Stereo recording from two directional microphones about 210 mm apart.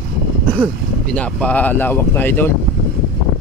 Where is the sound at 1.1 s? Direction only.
5° left (ahead or behind).